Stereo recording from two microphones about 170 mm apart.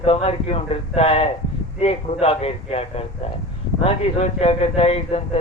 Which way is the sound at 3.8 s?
35° left (ahead or behind).